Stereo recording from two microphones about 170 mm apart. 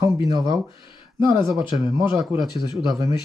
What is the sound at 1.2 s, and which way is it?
Speech, 30° left (ahead or behind).